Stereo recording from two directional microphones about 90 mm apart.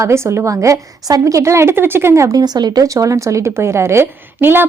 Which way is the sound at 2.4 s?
50° right (ahead or behind).